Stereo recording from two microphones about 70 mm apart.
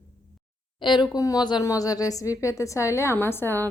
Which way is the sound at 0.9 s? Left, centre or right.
Left.